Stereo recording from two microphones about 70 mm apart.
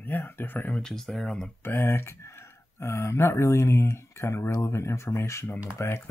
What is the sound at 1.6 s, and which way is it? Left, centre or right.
Speech, left.